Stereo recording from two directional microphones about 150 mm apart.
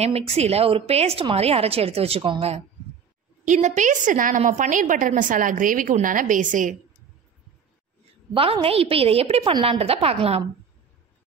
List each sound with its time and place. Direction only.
0.0 s a woman's voice: 45° right (ahead or behind)
3.4 s a woman's voice: 55° right (ahead or behind)
8.3 s a woman's voice: 35° right (ahead or behind)